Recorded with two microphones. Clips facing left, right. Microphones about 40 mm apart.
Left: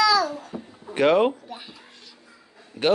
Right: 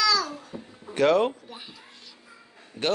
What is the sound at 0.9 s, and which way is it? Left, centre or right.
Speech, centre.